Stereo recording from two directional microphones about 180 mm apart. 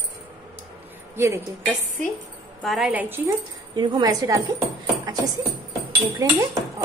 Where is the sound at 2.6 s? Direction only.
Centre (ahead or behind).